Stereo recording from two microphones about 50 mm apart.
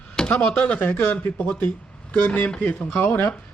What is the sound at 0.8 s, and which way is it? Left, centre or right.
Speech, left.